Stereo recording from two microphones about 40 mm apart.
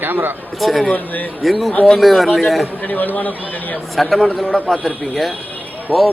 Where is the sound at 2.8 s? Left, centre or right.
Left.